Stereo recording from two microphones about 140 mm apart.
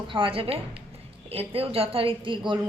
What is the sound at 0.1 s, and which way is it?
A woman's voice, 40° right (ahead or behind).